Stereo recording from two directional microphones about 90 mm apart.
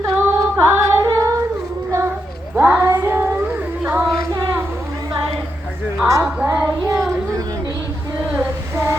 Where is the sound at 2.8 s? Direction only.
20° right (ahead or behind).